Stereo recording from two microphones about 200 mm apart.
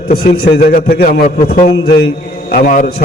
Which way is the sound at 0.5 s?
45° left (ahead or behind).